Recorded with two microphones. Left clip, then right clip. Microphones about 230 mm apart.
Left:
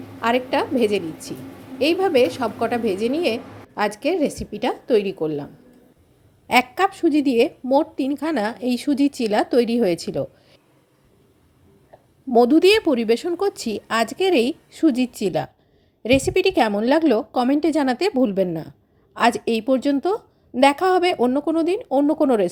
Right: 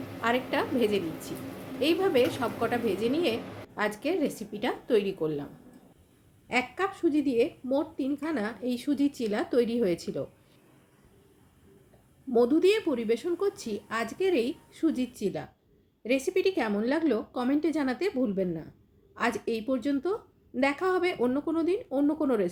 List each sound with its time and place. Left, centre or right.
0.2 s a woman's voice: left
6.5 s a woman's voice: left
12.3 s a woman's voice: left